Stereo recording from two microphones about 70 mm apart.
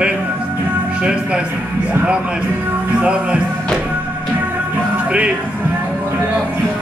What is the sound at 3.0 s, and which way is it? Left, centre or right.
Speech, centre.